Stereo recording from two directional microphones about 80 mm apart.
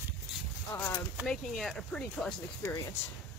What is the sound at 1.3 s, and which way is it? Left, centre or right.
Speech, centre.